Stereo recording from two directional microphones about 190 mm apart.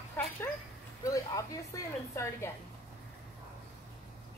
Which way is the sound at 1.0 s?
15° left (ahead or behind).